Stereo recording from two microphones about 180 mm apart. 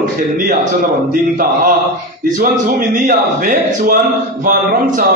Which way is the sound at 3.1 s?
50° right (ahead or behind).